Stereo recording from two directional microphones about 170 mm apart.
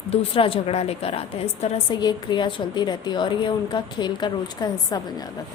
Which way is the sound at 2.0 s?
25° left (ahead or behind).